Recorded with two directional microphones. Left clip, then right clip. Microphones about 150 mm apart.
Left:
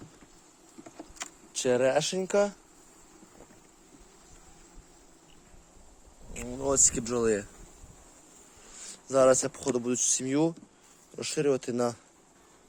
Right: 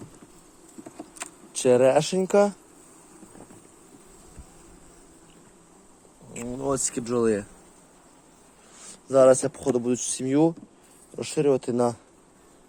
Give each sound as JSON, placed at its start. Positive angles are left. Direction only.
{"t": 1.5, "sound": "speech", "side_deg": -20}
{"t": 6.3, "sound": "insect", "side_deg": -20}
{"t": 6.6, "sound": "speech", "side_deg": -5}
{"t": 8.7, "sound": "speech", "side_deg": -5}